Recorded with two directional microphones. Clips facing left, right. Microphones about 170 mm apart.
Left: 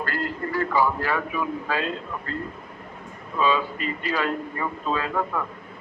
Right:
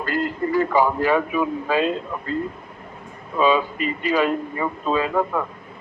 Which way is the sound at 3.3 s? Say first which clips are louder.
Right 4 dB; 15° right (ahead or behind).